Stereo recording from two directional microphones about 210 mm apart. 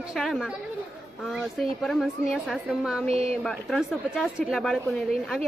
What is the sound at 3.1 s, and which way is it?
Speech, 30° right (ahead or behind).